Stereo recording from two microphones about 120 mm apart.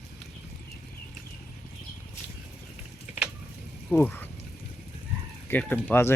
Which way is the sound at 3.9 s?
15° left (ahead or behind).